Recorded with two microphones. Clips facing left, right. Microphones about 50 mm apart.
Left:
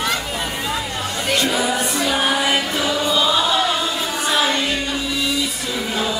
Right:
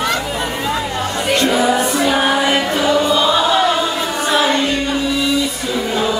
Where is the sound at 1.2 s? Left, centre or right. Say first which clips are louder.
Right 5 dB; centre.